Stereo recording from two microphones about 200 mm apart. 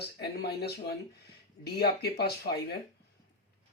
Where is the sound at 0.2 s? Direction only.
55° left (ahead or behind).